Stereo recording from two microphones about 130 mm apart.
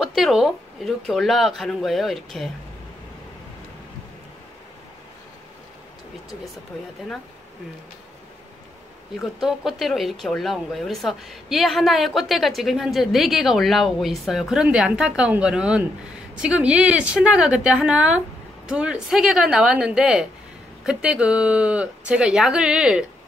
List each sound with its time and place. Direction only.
0.0 s speech: centre (ahead or behind)
9.2 s speech: centre (ahead or behind)